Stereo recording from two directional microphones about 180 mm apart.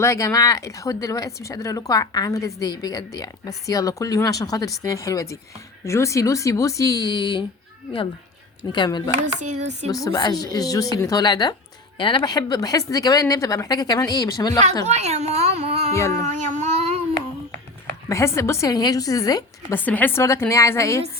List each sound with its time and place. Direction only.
0.0 s speech: 15° left (ahead or behind)
8.7 s speech: 25° left (ahead or behind)
9.4 s speech: 40° right (ahead or behind)
9.9 s speech: 20° left (ahead or behind)
14.8 s speech: 35° right (ahead or behind)
16.5 s child singing: 40° right (ahead or behind)
18.1 s speech: 15° left (ahead or behind)
19.8 s speech: 10° left (ahead or behind)